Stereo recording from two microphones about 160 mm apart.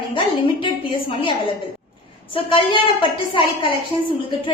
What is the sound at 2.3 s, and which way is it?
A woman's voice, 35° left (ahead or behind).